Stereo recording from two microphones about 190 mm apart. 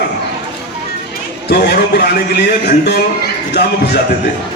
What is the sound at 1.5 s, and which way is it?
A man's voice, 60° left (ahead or behind).